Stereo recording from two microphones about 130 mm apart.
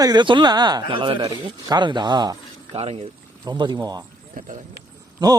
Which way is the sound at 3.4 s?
35° right (ahead or behind).